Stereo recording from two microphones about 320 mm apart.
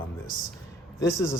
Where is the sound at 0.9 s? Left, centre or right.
Centre.